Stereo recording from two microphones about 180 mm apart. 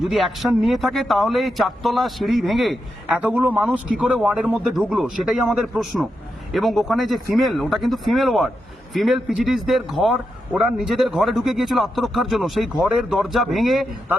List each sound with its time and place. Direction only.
0.0 s a man's voice: centre (ahead or behind)